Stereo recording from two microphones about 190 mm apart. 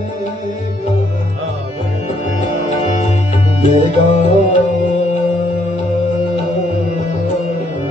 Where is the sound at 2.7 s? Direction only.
40° left (ahead or behind).